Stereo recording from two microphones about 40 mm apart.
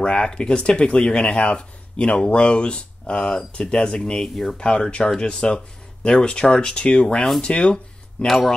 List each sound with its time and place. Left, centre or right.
0.0 s speech: left; by 4.6 s centre
4.6 s speech: centre